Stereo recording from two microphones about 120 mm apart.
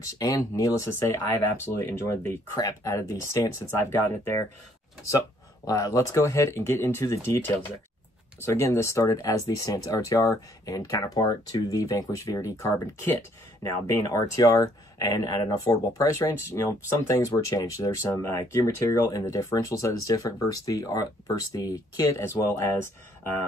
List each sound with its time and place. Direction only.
0.0 s speech: 30° left (ahead or behind)
5.7 s speech: 30° left (ahead or behind)
8.5 s speech: 25° left (ahead or behind)